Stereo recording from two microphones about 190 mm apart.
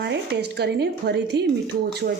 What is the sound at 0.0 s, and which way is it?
Speech, 60° right (ahead or behind).